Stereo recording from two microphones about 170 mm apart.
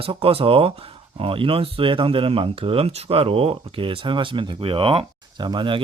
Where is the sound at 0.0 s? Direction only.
35° right (ahead or behind).